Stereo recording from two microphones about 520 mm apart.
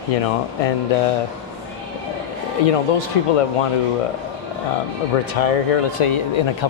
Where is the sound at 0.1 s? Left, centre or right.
Left.